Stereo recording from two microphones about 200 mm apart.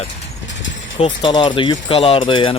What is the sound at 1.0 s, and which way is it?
Speech, 25° left (ahead or behind).